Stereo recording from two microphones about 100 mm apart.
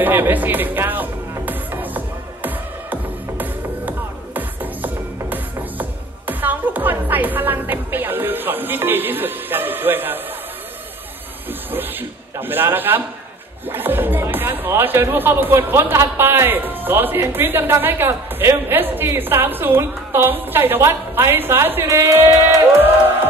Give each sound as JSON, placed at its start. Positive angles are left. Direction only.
{"t": 0.0, "sound": "music", "side_deg": -20}
{"t": 11.7, "sound": "speech", "side_deg": -20}